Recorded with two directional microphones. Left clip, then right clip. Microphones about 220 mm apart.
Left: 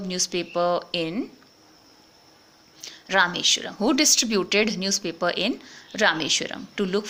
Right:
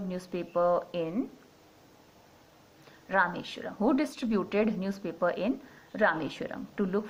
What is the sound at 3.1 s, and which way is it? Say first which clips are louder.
A woman's voice: left 8 dB; 45° left (ahead or behind).